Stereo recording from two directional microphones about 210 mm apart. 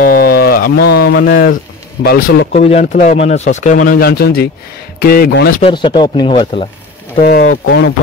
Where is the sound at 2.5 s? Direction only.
30° left (ahead or behind); by 5.6 s 50° left (ahead or behind).